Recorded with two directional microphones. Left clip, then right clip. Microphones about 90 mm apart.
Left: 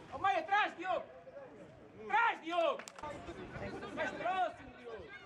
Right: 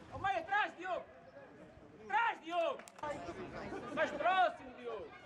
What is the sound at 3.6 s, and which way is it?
Chatter, 35° right (ahead or behind).